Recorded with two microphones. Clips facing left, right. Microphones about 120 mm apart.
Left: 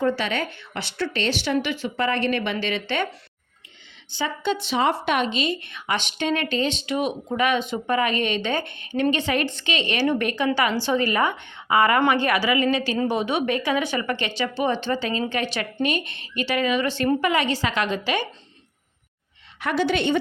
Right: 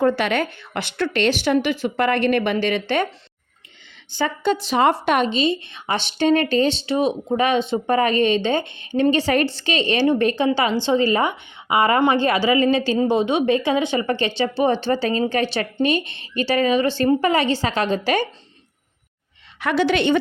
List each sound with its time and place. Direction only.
0.0 s a woman's voice: 55° right (ahead or behind)
0.9 s a woman's voice: 60° right (ahead or behind); by 1.9 s 45° right (ahead or behind)
2.0 s a woman's voice: 55° right (ahead or behind)
4.1 s a woman's voice: 45° right (ahead or behind)
19.5 s a woman's voice: 90° right